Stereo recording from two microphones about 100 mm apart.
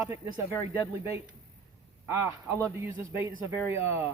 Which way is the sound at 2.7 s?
30° right (ahead or behind).